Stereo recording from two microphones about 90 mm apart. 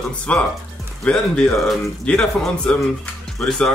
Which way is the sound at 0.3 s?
15° left (ahead or behind).